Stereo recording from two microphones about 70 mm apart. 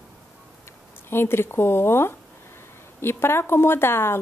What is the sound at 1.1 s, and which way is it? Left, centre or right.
Speech, left.